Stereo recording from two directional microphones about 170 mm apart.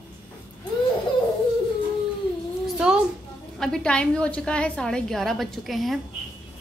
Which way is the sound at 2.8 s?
5° right (ahead or behind).